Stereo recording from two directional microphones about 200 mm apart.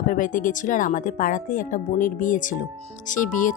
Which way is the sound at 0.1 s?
40° left (ahead or behind).